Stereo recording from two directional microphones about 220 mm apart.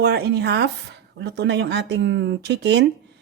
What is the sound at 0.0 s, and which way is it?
Speech, 45° right (ahead or behind).